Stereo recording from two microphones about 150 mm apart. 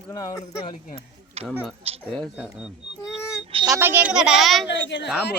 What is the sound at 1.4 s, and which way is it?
Speech, 40° right (ahead or behind).